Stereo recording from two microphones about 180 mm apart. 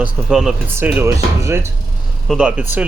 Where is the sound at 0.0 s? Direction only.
5° right (ahead or behind).